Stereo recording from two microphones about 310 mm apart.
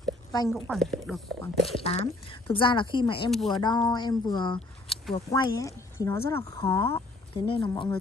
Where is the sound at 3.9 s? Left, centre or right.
Centre.